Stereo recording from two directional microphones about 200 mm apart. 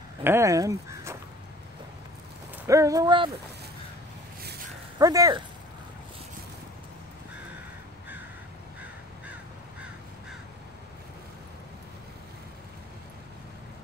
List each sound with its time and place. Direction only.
0.2 s speech: 15° right (ahead or behind)
2.6 s speech: 15° right (ahead or behind)
4.9 s speech: 15° right (ahead or behind)